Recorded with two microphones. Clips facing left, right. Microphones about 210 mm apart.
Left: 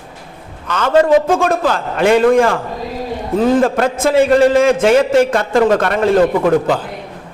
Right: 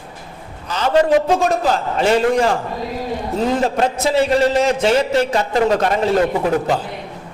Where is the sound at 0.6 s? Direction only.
55° left (ahead or behind).